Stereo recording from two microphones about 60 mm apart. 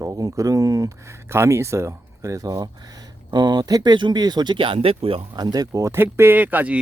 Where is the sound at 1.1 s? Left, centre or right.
Right.